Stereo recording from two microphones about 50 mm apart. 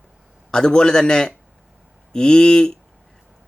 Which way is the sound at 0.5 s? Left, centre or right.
Centre.